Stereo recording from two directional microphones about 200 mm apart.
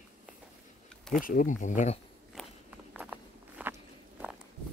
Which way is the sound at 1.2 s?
40° left (ahead or behind).